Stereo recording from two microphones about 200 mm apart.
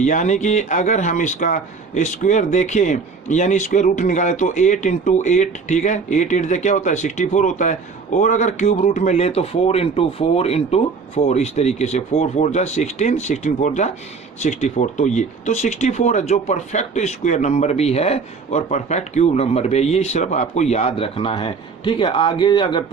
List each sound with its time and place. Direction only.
0.0 s speech: 35° left (ahead or behind)